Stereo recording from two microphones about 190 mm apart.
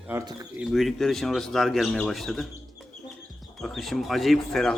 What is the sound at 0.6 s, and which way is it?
Speech, centre (ahead or behind).